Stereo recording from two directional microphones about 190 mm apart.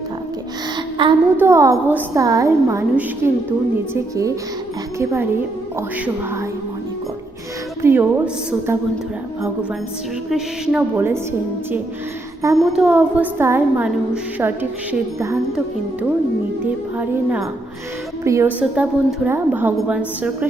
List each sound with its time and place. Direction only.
1.0 s a child's voice: 25° right (ahead or behind)
1.4 s a woman's voice: 15° right (ahead or behind)
4.9 s a woman's voice: 15° right (ahead or behind)
7.8 s a woman's voice: 10° right (ahead or behind)
10.2 s a woman's voice: centre (ahead or behind)
12.6 s a woman's voice: 5° right (ahead or behind)
16.6 s a woman's voice: 10° right (ahead or behind)